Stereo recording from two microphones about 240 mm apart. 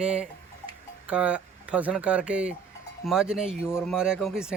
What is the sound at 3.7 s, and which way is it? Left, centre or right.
Speech, centre.